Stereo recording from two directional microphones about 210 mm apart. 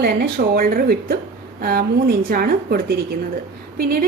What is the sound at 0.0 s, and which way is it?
A woman's voice, 45° right (ahead or behind).